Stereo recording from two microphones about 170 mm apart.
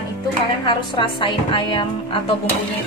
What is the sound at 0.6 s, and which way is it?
Speech, 30° left (ahead or behind).